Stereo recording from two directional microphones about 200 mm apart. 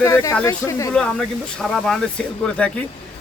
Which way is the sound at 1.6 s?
Centre (ahead or behind).